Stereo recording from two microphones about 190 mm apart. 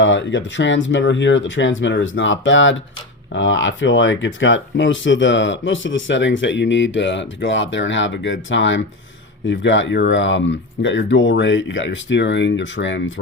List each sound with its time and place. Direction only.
0.0 s speech: 75° left (ahead or behind)